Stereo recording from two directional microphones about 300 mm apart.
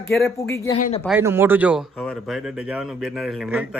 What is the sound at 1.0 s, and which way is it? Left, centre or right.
Speech, centre.